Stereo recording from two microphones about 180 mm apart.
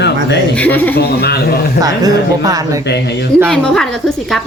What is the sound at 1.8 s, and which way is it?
Speech, 20° right (ahead or behind).